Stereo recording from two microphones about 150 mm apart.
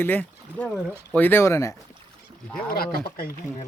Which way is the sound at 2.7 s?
90° left.